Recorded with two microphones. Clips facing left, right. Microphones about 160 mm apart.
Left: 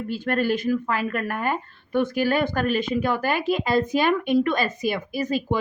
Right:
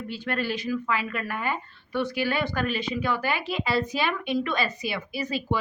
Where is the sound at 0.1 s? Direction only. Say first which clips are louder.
Left 6 dB; 45° left (ahead or behind).